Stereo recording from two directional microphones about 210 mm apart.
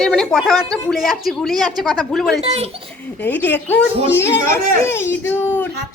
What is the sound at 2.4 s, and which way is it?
Speech, 30° right (ahead or behind).